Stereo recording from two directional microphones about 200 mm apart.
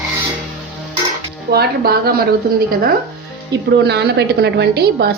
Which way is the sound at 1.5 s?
50° right (ahead or behind).